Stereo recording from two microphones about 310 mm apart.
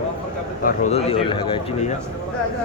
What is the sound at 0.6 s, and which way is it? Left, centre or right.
Speech, left.